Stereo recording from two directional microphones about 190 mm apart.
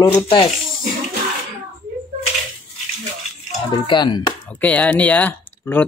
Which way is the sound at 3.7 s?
25° left (ahead or behind).